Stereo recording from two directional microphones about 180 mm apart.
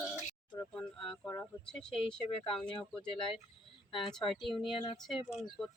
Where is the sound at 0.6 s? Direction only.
5° left (ahead or behind).